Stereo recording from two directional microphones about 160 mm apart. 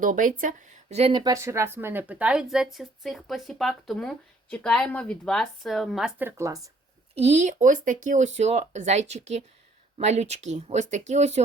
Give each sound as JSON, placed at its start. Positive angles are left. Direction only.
{"t": 0.0, "sound": "speech", "side_deg": -55}
{"t": 0.9, "sound": "speech", "side_deg": -35}
{"t": 1.2, "sound": "speech", "side_deg": -20}
{"t": 7.2, "sound": "speech", "side_deg": -45}